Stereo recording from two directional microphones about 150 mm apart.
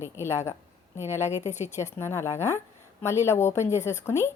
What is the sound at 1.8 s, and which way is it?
A woman's voice, 15° left (ahead or behind).